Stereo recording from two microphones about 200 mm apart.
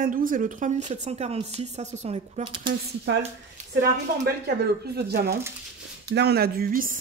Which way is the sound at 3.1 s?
65° right (ahead or behind).